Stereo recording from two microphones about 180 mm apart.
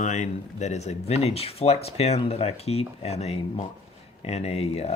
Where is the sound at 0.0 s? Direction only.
40° left (ahead or behind).